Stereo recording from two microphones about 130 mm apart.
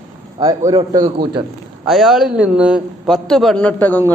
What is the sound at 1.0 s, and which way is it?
Speech, 40° right (ahead or behind).